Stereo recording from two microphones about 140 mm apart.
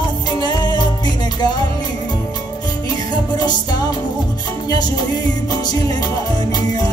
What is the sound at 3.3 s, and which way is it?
Music, 30° left (ahead or behind).